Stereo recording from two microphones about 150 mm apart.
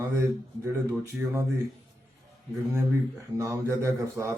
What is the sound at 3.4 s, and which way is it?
Speech, 20° right (ahead or behind).